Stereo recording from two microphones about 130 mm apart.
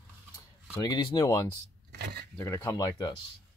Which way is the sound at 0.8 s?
35° left (ahead or behind).